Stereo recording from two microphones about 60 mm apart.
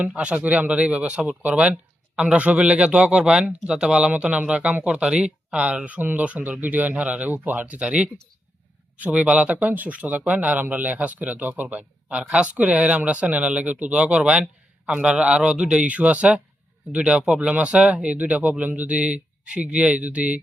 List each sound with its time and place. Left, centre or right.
0.1 s speech: centre
7.8 s speech: centre